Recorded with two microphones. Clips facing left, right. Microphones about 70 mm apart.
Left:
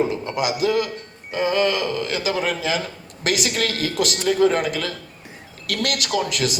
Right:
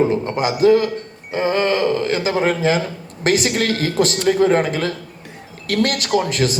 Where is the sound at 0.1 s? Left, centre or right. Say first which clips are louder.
Right 4 dB; right.